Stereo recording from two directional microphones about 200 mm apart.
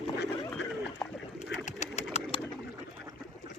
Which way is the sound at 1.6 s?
35° left (ahead or behind).